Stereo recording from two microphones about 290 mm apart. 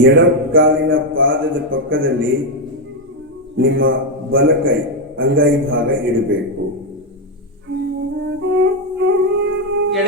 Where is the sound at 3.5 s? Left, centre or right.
Right.